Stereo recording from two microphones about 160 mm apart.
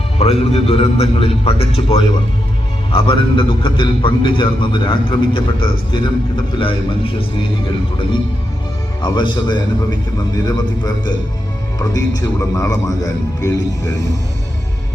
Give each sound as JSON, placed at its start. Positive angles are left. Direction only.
{"t": 0.2, "sound": "a man's voice", "side_deg": 40}
{"t": 9.0, "sound": "a man's voice", "side_deg": 30}